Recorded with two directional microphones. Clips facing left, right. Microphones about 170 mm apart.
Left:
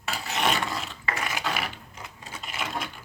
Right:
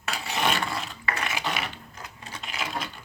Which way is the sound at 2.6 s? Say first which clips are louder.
Even; centre (ahead or behind).